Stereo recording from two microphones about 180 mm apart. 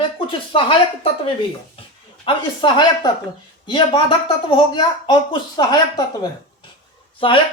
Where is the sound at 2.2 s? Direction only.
25° left (ahead or behind).